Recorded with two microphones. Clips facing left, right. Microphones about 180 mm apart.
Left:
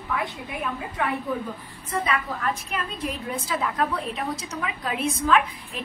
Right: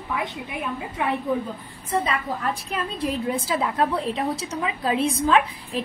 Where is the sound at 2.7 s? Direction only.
30° right (ahead or behind).